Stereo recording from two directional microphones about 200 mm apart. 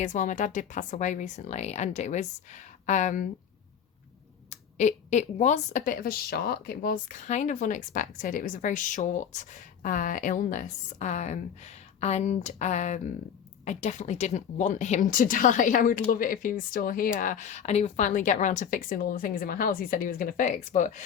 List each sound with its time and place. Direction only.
0.0 s speech: 40° left (ahead or behind)
4.4 s speech: 35° left (ahead or behind)